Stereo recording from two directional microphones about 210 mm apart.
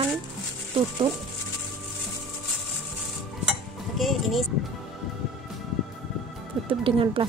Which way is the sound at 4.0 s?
Centre (ahead or behind).